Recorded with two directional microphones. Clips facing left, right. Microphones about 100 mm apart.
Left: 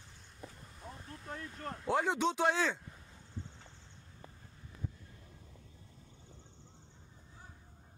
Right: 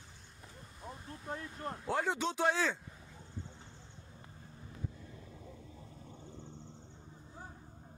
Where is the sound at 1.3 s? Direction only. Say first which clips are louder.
Right 2 dB; 20° right (ahead or behind).